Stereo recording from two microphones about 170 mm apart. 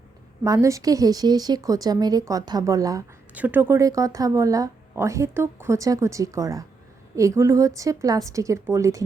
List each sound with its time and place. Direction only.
0.4 s speech: 20° right (ahead or behind)